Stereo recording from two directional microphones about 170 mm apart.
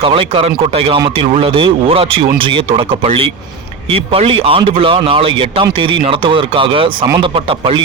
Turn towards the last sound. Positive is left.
turn(degrees=-30)  # may be behind; listen again after turning